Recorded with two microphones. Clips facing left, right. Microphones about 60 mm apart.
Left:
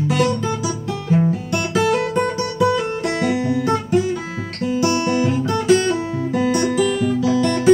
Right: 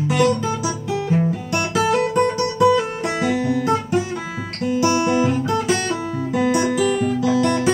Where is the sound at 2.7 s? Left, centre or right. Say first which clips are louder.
Even; centre.